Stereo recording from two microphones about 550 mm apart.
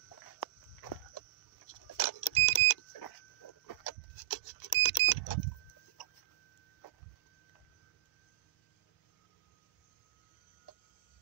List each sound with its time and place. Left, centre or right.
0.4 s chicken: left
2.0 s vehicle: left